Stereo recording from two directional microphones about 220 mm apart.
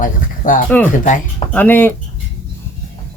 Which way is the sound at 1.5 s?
10° left (ahead or behind).